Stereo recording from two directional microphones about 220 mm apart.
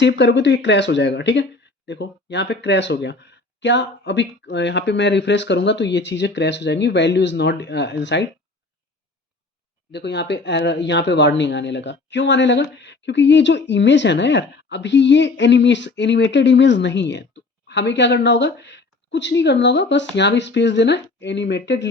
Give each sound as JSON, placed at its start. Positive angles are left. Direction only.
{"t": 0.0, "sound": "speech", "side_deg": 50}
{"t": 9.9, "sound": "speech", "side_deg": 50}